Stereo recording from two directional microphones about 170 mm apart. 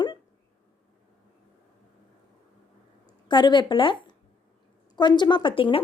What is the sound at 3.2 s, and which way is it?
A woman's voice, 25° left (ahead or behind).